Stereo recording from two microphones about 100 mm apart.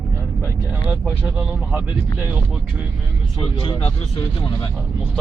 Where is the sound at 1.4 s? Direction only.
15° right (ahead or behind).